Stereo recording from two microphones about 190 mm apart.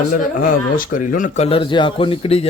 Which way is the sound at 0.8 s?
45° left (ahead or behind).